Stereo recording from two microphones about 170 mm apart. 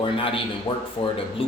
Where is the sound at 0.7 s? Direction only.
20° left (ahead or behind).